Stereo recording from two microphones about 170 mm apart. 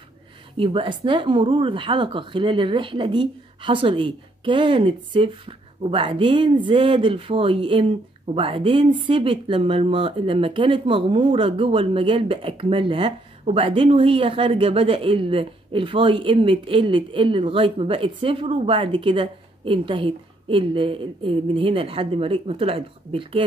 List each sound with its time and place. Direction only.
0.6 s speech: 30° right (ahead or behind)